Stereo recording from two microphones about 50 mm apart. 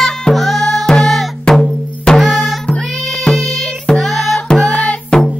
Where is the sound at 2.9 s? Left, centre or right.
Centre.